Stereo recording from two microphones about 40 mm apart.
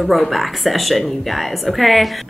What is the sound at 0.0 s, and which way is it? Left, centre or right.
A woman's voice, centre.